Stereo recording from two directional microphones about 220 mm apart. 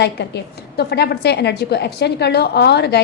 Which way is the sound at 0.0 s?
50° left (ahead or behind).